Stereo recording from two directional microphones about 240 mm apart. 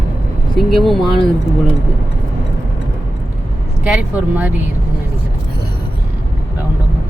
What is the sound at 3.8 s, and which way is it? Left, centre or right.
Speech, centre.